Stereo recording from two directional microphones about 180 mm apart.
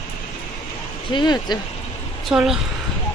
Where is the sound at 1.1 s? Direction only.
25° left (ahead or behind).